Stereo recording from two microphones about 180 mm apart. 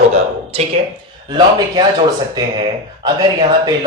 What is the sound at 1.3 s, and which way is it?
Speech, 25° right (ahead or behind).